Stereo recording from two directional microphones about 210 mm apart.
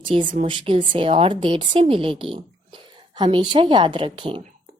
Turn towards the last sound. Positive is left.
turn(degrees=-25)  # may be behind; listen again after turning